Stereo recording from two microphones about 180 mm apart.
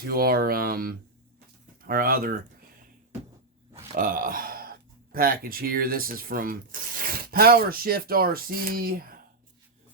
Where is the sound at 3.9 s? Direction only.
50° right (ahead or behind).